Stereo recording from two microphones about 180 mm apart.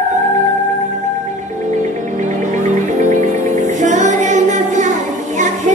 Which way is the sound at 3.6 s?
40° right (ahead or behind).